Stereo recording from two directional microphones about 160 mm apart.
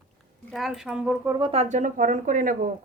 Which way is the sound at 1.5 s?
45° right (ahead or behind).